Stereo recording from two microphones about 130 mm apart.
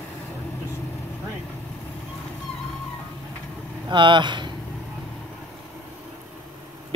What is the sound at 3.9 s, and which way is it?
Speech, 35° right (ahead or behind).